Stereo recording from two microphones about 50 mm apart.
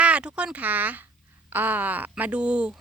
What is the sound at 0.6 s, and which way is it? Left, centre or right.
Speech, right.